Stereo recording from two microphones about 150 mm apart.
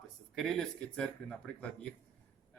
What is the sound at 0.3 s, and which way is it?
Speech, 5° left (ahead or behind).